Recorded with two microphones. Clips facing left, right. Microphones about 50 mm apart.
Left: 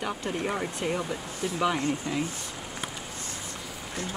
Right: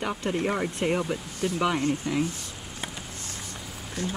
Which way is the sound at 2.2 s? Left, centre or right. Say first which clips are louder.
Right 1 dB; left.